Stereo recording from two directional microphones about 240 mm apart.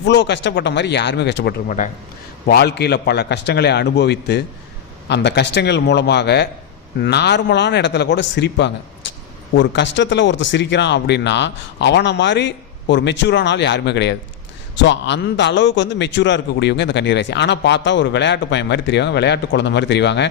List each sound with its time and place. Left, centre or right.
0.0 s a man's voice: left
9.0 s a sound: left
9.6 s a man's voice: left